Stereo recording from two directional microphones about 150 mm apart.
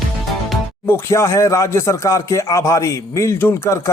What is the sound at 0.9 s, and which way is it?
A man's voice, 15° left (ahead or behind).